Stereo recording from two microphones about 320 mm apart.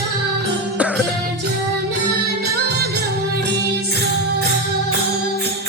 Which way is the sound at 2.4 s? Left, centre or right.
Right.